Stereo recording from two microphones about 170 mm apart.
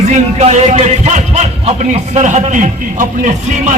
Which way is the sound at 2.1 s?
40° right (ahead or behind).